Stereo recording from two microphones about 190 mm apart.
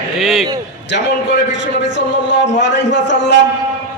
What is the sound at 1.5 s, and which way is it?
A man's voice, 70° left (ahead or behind).